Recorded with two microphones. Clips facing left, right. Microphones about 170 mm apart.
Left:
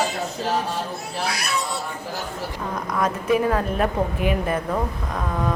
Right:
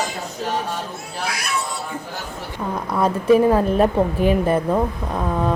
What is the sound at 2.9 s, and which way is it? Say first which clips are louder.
A woman's voice: right 6 dB; 30° right (ahead or behind).